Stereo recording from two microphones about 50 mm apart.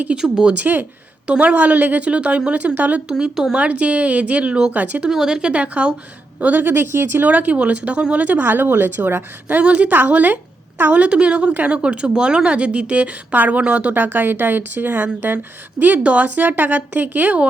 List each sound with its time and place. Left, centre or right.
0.1 s speech: centre
0.5 s a woman's voice: right
1.3 s a woman's voice: right
3.1 s speech: centre
3.5 s a woman's voice: right
4.7 s a woman's voice: right
5.0 s a woman's voice: centre
6.4 s speech: right
7.3 s a woman's voice: right
9.6 s a woman's voice: right
11.5 s a woman's voice: right
11.8 s a woman's voice: right
13.9 s a woman's voice: right